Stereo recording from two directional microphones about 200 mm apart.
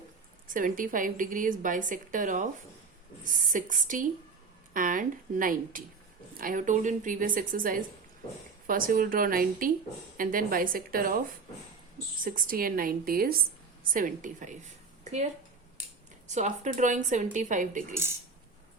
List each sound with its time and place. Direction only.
0.4 s a woman's voice: 40° right (ahead or behind)
12.2 s a woman's voice: 45° right (ahead or behind)
16.3 s a woman's voice: 35° right (ahead or behind)